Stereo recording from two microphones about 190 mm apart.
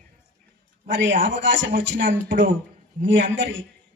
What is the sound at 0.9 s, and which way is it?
A woman's voice, 75° right (ahead or behind).